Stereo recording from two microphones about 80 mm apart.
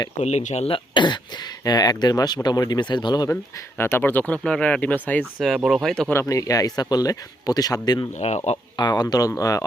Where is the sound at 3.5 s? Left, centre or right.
Left.